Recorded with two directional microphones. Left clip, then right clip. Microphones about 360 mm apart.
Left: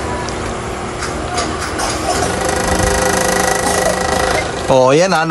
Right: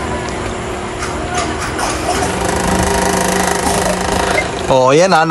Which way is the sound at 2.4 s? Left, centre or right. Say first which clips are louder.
Even; centre.